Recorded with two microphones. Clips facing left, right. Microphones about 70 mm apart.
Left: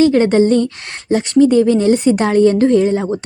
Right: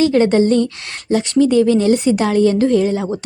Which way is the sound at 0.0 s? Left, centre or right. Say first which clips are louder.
Left 2 dB; left.